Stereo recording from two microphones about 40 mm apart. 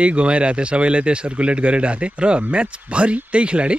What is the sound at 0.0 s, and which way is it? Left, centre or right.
Speech, right.